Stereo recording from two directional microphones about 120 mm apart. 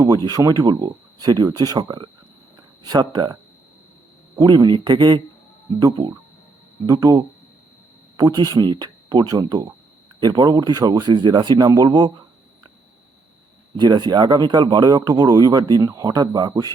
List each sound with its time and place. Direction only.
0.3 s speech: 30° right (ahead or behind)
4.4 s speech: 35° right (ahead or behind)
13.7 s speech: 35° right (ahead or behind)